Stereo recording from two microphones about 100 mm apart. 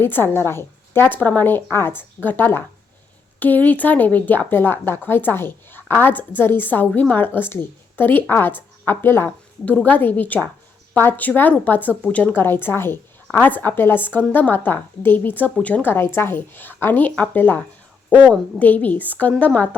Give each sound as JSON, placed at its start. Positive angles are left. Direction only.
{"t": 0.0, "sound": "speech", "side_deg": 20}
{"t": 18.6, "sound": "a woman's voice", "side_deg": 15}